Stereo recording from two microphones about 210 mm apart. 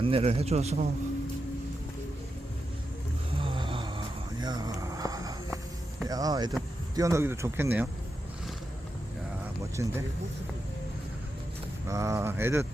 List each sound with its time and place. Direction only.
0.0 s a man's voice: 30° right (ahead or behind)
3.3 s a sound: 25° right (ahead or behind)
6.1 s speech: 20° right (ahead or behind)
9.7 s speech: 15° right (ahead or behind)
11.9 s speech: 15° right (ahead or behind)